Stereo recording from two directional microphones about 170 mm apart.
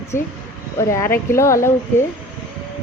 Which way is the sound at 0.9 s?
15° left (ahead or behind).